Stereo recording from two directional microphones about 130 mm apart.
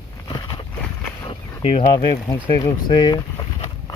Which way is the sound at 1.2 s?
45° left (ahead or behind).